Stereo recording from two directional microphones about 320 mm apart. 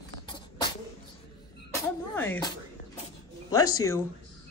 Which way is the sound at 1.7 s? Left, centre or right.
Centre.